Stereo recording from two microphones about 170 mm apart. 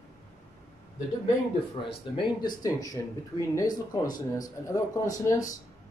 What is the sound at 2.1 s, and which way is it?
Speech, 30° left (ahead or behind).